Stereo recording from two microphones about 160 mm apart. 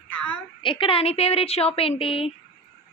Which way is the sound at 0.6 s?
30° left (ahead or behind).